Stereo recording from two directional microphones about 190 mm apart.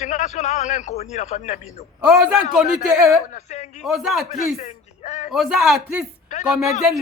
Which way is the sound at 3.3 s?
35° left (ahead or behind).